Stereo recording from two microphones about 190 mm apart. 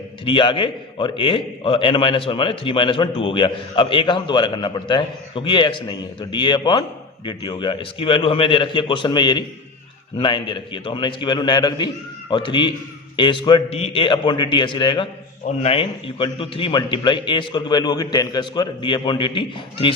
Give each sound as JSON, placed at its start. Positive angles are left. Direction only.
{"t": 0.3, "sound": "a man's voice", "side_deg": 25}